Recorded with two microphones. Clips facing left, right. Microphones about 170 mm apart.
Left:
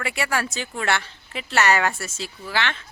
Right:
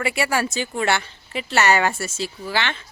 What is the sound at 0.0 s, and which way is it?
Speech, 5° right (ahead or behind).